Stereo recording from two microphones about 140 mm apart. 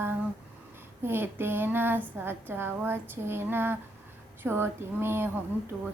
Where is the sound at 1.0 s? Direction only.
15° right (ahead or behind).